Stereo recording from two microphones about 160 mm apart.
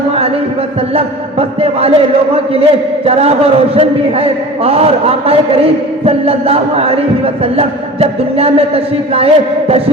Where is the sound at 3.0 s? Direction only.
40° right (ahead or behind).